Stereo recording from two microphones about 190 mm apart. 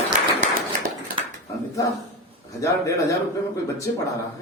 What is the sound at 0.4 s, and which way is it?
Clapping, 50° right (ahead or behind).